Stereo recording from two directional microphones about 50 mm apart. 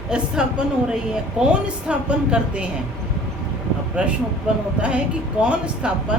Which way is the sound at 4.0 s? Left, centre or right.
Right.